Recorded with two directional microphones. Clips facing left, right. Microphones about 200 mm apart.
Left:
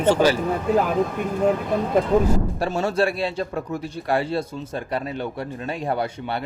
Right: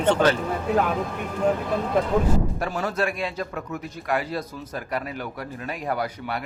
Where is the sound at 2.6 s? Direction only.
30° left (ahead or behind).